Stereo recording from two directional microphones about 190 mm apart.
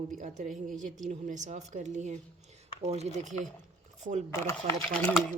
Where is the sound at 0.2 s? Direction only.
40° right (ahead or behind).